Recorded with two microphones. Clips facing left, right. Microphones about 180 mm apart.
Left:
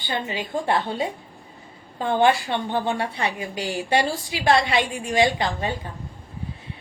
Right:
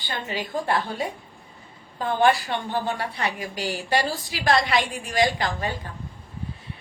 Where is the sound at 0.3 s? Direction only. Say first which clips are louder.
Even; 25° left (ahead or behind).